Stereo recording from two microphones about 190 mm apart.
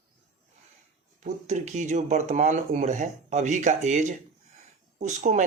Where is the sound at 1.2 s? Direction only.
40° right (ahead or behind).